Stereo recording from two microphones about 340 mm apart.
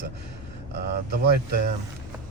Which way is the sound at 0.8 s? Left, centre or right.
Right.